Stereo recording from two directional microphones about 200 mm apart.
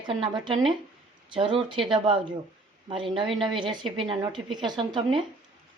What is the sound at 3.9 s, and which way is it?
Speech, 25° right (ahead or behind).